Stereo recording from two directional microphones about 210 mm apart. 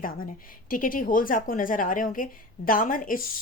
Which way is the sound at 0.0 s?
40° left (ahead or behind).